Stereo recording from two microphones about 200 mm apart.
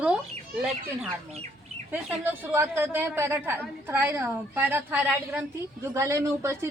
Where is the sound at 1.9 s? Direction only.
10° right (ahead or behind).